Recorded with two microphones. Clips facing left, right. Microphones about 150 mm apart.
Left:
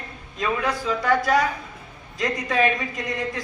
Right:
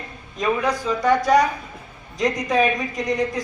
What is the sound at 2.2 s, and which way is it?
Speech, 20° right (ahead or behind).